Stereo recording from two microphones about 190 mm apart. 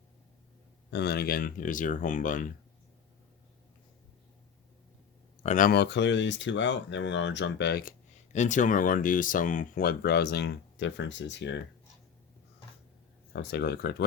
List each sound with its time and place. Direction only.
0.9 s speech: 60° left (ahead or behind); by 2.5 s 45° left (ahead or behind)
5.4 s speech: 40° left (ahead or behind); by 7.9 s 55° left (ahead or behind)
8.3 s speech: 40° left (ahead or behind); by 11.6 s 70° left (ahead or behind)
13.3 s speech: 60° left (ahead or behind)